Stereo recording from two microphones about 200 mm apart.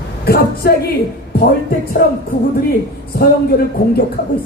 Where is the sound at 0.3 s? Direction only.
50° left (ahead or behind).